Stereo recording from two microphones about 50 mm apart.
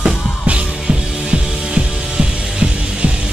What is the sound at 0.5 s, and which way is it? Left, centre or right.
Music, right.